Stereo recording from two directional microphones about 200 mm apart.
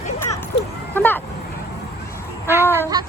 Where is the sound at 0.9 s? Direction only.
10° left (ahead or behind).